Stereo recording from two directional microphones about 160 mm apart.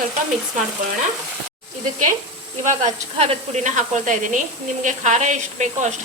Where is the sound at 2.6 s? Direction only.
45° right (ahead or behind).